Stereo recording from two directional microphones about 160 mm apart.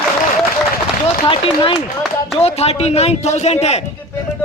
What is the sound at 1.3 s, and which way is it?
A man's voice, 35° left (ahead or behind).